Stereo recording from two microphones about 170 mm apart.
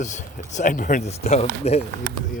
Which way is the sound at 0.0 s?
45° left (ahead or behind).